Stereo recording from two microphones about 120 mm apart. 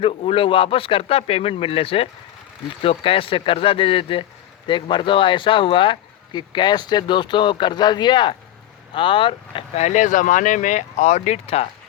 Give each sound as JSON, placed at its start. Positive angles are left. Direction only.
{"t": 0.0, "sound": "speech", "side_deg": 55}
{"t": 9.7, "sound": "speech", "side_deg": 80}